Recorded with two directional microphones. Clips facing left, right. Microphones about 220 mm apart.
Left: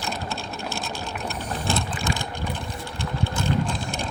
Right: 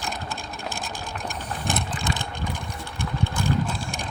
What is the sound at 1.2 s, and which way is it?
Ratchet, 15° right (ahead or behind).